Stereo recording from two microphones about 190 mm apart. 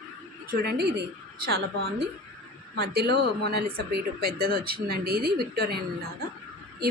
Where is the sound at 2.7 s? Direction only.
60° right (ahead or behind).